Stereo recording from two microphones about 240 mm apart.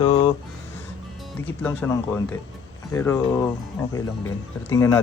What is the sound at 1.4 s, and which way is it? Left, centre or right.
Speech, centre.